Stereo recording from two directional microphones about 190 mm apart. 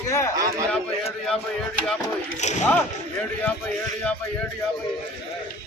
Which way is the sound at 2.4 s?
35° left (ahead or behind).